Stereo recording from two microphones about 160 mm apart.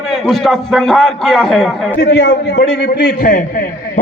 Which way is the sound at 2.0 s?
90° left.